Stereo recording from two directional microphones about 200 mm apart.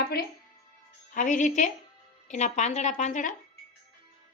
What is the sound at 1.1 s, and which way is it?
Speech, 40° left (ahead or behind).